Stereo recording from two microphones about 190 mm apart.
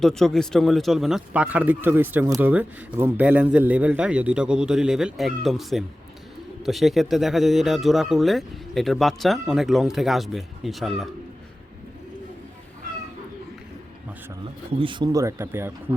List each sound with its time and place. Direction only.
0.0 s a man's voice: centre (ahead or behind)
14.8 s speech: 25° right (ahead or behind)